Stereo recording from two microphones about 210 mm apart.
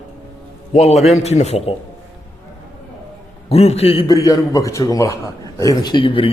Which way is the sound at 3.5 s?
30° left (ahead or behind).